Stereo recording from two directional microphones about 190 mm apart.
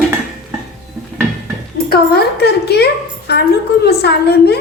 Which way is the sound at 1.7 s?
55° left (ahead or behind).